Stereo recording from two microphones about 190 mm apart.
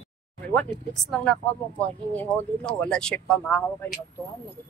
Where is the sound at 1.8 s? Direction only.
10° left (ahead or behind).